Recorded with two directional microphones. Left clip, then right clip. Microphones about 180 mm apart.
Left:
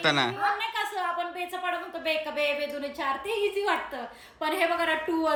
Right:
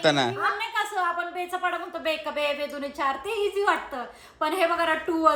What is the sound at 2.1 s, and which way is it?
Speech, 5° right (ahead or behind).